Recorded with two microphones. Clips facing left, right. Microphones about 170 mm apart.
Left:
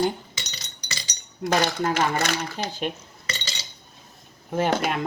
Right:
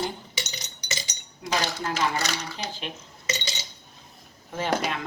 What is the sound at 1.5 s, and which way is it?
Speech, 50° left (ahead or behind).